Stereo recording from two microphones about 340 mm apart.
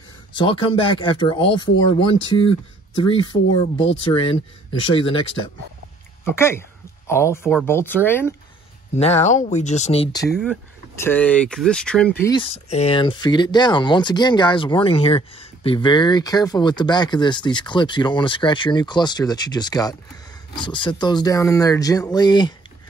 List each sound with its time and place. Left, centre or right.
0.4 s speech: centre
6.3 s speech: centre
8.9 s speech: centre
10.3 s speech: centre